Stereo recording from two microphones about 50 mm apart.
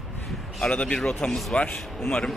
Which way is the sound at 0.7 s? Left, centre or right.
Left.